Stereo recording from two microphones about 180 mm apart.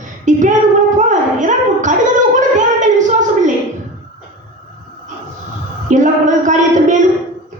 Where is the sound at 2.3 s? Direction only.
45° right (ahead or behind).